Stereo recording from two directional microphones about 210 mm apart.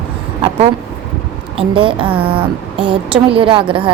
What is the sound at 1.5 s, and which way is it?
A woman's voice, 25° right (ahead or behind).